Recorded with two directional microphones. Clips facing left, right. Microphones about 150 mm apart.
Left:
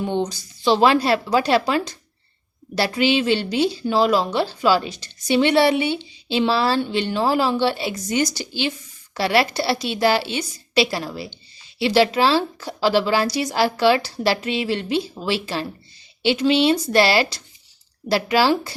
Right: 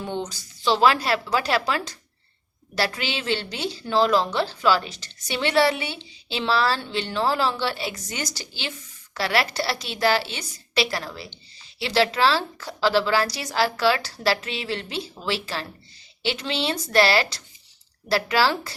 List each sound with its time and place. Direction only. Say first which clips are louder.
0.0 s speech: left 7 dB; 25° left (ahead or behind)
2.7 s a woman's voice: left 8 dB; 20° left (ahead or behind)